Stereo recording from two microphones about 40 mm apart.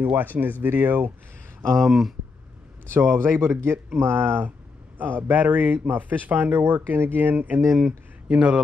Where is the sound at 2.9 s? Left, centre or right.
Right.